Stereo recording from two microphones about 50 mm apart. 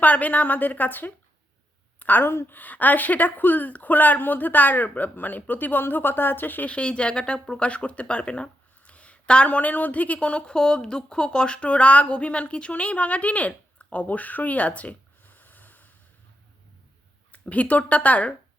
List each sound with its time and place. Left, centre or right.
0.0 s a woman's voice: left
5.8 s a woman's voice: left
6.7 s speech: left
17.3 s speech: left